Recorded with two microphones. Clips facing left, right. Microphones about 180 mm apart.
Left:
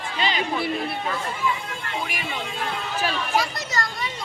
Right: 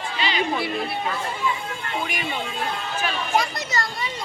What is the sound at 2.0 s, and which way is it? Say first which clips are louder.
Speech: right 2 dB; centre (ahead or behind).